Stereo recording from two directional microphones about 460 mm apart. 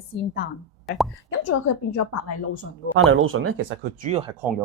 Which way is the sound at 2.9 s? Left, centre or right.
Right.